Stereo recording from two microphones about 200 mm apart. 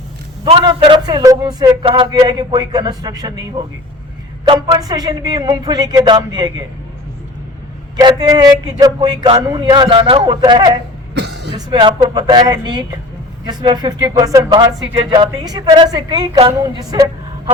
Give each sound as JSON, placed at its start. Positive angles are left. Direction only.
{"t": 0.4, "sound": "speech", "side_deg": -25}
{"t": 4.4, "sound": "speech", "side_deg": -20}
{"t": 7.9, "sound": "speech", "side_deg": -20}
{"t": 11.1, "sound": "cough", "side_deg": -60}
{"t": 11.5, "sound": "speech", "side_deg": -25}